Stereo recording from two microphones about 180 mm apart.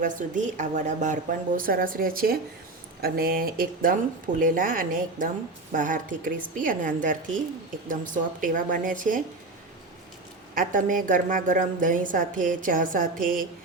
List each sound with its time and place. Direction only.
0.0 s a woman's voice: 45° right (ahead or behind)
10.5 s a woman's voice: 50° right (ahead or behind)